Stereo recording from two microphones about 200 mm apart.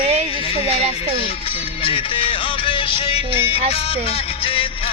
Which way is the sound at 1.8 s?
25° left (ahead or behind).